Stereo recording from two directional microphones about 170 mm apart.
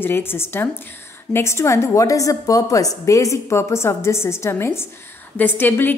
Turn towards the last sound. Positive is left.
turn(degrees=10)  # may be behind; listen again after turning